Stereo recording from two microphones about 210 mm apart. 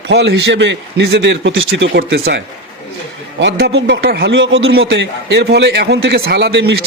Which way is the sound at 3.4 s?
55° right (ahead or behind).